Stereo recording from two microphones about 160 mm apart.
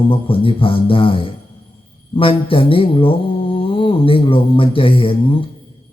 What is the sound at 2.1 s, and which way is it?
Mantra, 35° left (ahead or behind).